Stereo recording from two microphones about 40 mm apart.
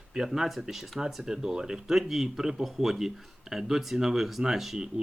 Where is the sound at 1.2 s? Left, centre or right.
Centre.